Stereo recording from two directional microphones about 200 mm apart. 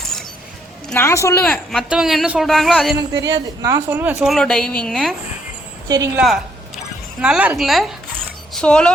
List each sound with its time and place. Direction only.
0.0 s keys jangling: centre (ahead or behind)
0.9 s a woman's voice: 10° left (ahead or behind)
1.7 s speech: centre (ahead or behind)
3.3 s speech: 15° right (ahead or behind); by 5.1 s 5° left (ahead or behind)
5.9 s a woman's voice: 15° right (ahead or behind); by 8.9 s 5° left (ahead or behind)